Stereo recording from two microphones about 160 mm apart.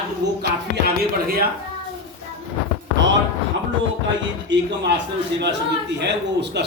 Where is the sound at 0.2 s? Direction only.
90° right.